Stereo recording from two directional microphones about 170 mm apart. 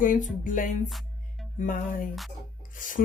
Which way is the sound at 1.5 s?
55° left (ahead or behind).